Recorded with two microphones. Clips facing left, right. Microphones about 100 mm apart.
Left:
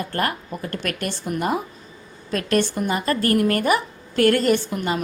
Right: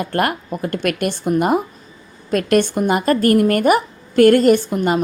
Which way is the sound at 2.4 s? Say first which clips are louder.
Right 5 dB; 55° right (ahead or behind).